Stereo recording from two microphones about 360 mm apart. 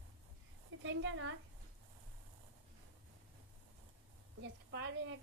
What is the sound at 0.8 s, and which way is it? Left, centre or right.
Speech, right.